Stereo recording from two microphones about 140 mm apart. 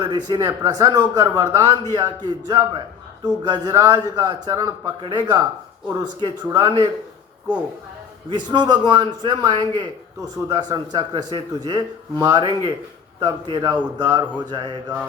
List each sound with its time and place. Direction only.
0.0 s a man's voice: 30° right (ahead or behind)
8.3 s a man's voice: 30° right (ahead or behind)